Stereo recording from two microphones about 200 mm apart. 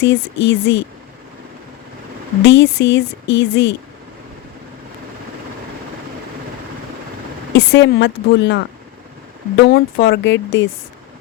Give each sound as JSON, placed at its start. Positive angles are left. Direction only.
{"t": 0.0, "sound": "speech", "side_deg": 65}
{"t": 2.4, "sound": "speech", "side_deg": 65}
{"t": 7.5, "sound": "speech", "side_deg": 60}